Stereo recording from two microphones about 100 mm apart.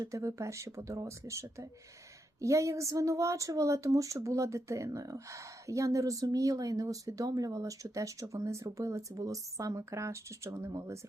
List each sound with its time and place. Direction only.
0.0 s a woman's voice: 30° right (ahead or behind)